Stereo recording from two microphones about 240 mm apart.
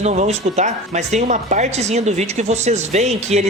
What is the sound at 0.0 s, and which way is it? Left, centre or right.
Speech, right.